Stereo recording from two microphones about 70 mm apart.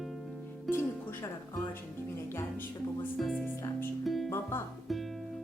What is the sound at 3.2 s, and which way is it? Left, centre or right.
Music, centre.